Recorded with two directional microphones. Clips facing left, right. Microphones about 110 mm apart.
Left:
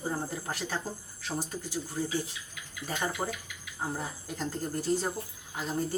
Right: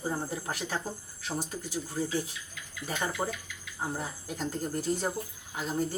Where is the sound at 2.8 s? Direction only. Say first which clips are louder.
Even; 15° right (ahead or behind).